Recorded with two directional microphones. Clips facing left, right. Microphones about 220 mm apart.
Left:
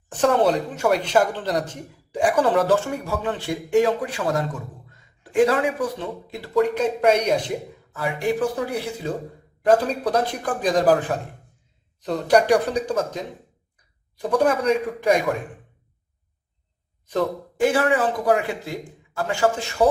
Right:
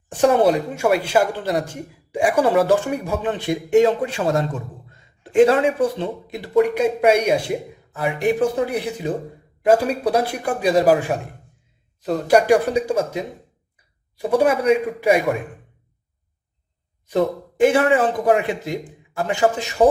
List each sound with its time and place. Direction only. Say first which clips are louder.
0.1 s speech: right 3 dB; 10° right (ahead or behind)
7.9 s speech: right 4 dB; 20° right (ahead or behind)
13.7 s a sound: even; 10° right (ahead or behind)
15.0 s speech: right 2 dB; 10° right (ahead or behind)
17.1 s speech: right 4 dB; 15° right (ahead or behind)